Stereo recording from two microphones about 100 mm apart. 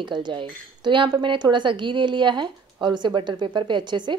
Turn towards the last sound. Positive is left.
turn(degrees=-50)  # may be behind; listen again after turning